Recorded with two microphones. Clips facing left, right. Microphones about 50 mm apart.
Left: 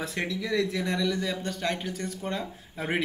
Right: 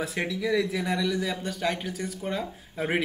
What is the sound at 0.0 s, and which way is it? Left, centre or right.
A man's voice, centre.